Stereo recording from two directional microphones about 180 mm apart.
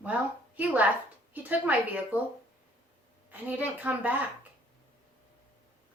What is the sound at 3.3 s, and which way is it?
Speech, 10° right (ahead or behind).